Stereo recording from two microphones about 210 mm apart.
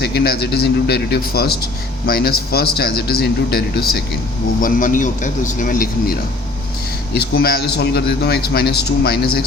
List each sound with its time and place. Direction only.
0.0 s a man's voice: 50° left (ahead or behind)